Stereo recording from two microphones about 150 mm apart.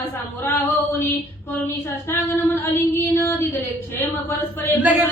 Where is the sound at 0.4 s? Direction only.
15° left (ahead or behind).